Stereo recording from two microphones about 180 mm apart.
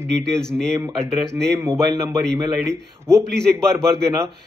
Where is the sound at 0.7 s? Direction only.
15° right (ahead or behind).